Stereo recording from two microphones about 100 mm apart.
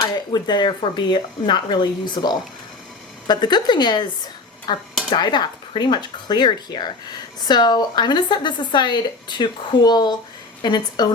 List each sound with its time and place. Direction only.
0.0 s a woman's voice: 45° left (ahead or behind)